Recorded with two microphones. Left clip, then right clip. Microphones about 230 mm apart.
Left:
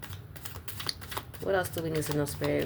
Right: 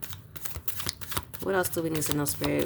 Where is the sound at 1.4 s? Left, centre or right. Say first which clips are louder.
Right 2 dB; right.